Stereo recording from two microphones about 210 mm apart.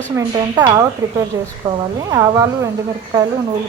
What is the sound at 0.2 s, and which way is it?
Speech, 15° right (ahead or behind).